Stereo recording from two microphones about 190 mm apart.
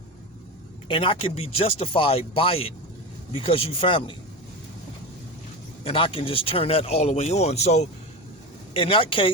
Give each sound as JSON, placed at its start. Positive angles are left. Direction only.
{"t": 0.9, "sound": "speech", "side_deg": 25}
{"t": 5.8, "sound": "speech", "side_deg": 30}